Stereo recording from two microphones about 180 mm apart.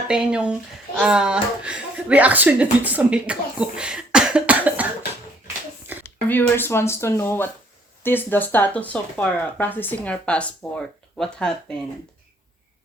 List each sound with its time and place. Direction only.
0.1 s speech: 5° right (ahead or behind)
6.0 s speech: 10° left (ahead or behind)